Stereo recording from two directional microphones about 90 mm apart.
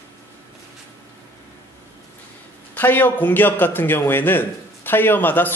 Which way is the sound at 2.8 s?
20° left (ahead or behind).